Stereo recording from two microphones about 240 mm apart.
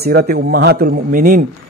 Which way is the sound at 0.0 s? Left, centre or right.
Right.